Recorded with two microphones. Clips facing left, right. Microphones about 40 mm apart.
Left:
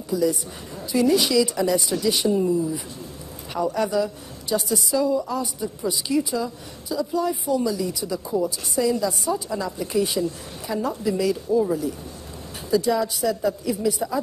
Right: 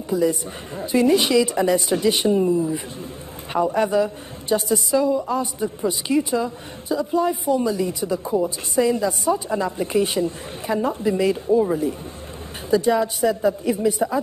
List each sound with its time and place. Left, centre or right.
0.1 s a woman's voice: right